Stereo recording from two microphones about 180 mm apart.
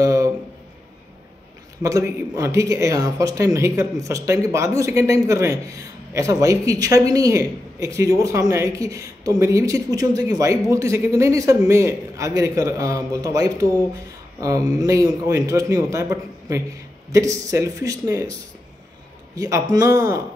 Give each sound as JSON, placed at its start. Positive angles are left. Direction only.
{"t": 0.0, "sound": "a sound", "side_deg": -20}
{"t": 1.8, "sound": "speech", "side_deg": -15}
{"t": 19.3, "sound": "speech", "side_deg": -20}